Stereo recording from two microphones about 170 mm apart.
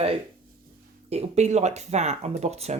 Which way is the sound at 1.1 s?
40° right (ahead or behind).